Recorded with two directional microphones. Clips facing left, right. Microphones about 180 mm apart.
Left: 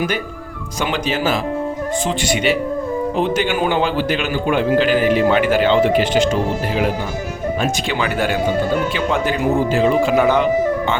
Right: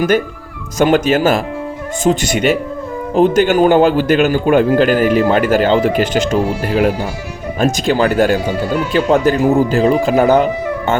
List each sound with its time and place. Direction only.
0.8 s a man's voice: 45° right (ahead or behind)